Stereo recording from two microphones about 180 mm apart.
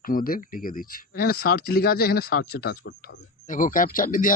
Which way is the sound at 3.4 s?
45° left (ahead or behind).